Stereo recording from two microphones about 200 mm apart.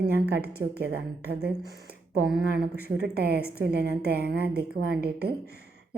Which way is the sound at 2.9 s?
55° right (ahead or behind).